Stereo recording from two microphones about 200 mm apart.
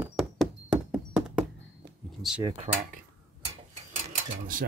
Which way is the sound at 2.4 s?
25° right (ahead or behind).